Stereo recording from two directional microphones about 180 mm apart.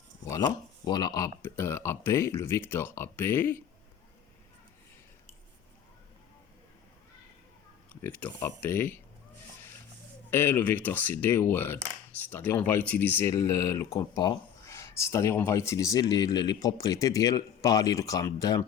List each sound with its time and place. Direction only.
0.9 s speech: 25° left (ahead or behind)
8.0 s speech: 10° left (ahead or behind)
10.3 s speech: 10° left (ahead or behind)